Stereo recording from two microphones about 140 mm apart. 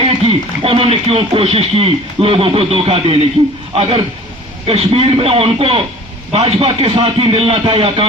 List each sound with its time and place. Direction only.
0.3 s speech: 45° right (ahead or behind)